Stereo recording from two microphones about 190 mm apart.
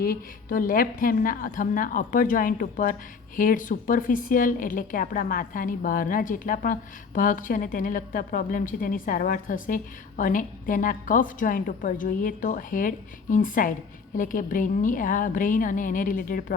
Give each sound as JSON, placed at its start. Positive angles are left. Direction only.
{"t": 0.0, "sound": "speech", "side_deg": 50}